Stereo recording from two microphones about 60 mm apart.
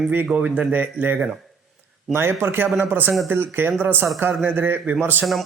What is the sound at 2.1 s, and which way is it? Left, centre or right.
A man's voice, right.